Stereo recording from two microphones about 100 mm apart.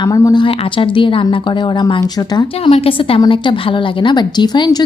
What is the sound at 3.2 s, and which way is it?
Speech, 55° left (ahead or behind).